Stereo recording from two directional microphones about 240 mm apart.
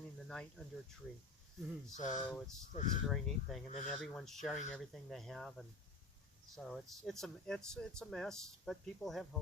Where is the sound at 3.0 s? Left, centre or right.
Centre.